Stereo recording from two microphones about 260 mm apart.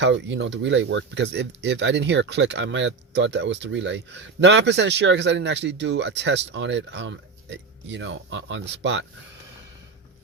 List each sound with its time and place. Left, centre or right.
0.0 s speech: right